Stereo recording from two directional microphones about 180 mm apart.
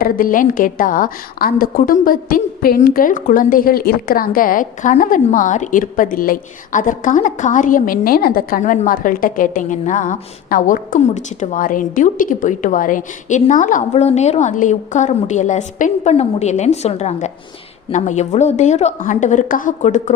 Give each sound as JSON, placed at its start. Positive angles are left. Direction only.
{"t": 0.0, "sound": "a woman's voice", "side_deg": 50}